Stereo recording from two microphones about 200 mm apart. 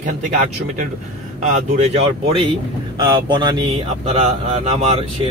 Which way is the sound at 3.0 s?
20° right (ahead or behind).